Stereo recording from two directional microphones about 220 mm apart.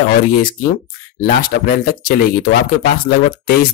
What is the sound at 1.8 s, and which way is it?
Speech, 40° left (ahead or behind).